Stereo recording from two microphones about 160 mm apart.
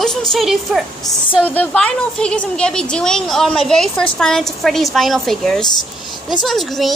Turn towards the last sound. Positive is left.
turn(degrees=0)  # may be behind; listen again after turning